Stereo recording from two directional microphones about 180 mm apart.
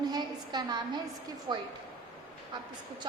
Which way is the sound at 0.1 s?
25° right (ahead or behind).